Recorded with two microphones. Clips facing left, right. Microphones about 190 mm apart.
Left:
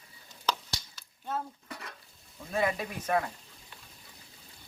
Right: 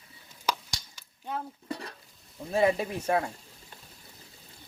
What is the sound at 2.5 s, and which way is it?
Speech, 30° right (ahead or behind).